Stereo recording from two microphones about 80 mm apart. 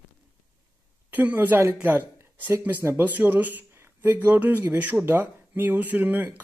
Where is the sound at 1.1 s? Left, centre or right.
Right.